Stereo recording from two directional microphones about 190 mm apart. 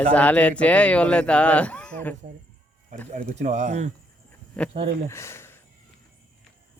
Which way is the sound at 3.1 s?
40° right (ahead or behind).